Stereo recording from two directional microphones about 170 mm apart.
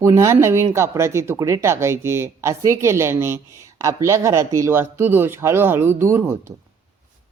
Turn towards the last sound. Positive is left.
turn(degrees=-15)  # may be behind; listen again after turning